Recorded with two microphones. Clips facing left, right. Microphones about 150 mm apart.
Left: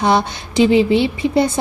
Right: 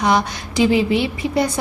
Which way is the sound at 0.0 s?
30° left (ahead or behind).